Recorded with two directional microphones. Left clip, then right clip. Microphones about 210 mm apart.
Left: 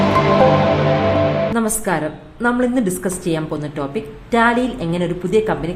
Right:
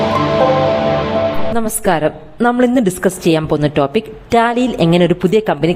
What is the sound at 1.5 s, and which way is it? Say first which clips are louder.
A woman's voice: right 4 dB; 40° right (ahead or behind).